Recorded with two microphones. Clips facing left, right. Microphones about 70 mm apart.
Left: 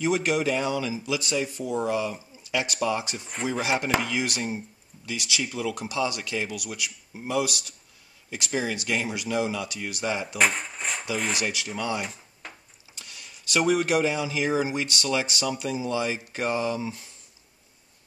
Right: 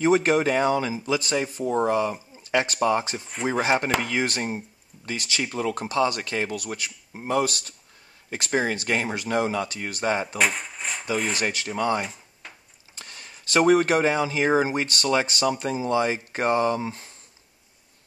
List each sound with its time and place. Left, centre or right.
0.0 s speech: right
10.3 s a sound: centre
11.4 s speech: right